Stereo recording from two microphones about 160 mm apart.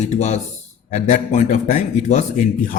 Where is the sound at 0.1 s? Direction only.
45° left (ahead or behind).